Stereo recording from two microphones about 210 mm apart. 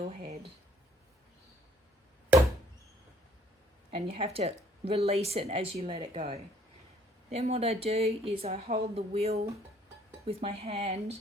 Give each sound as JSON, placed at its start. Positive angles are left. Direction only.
{"t": 3.9, "sound": "a woman's voice", "side_deg": -30}